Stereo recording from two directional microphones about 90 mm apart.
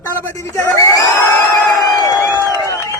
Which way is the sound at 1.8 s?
40° left (ahead or behind).